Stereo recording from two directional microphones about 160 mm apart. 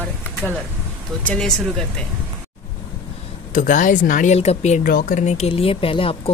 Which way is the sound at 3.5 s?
55° left (ahead or behind).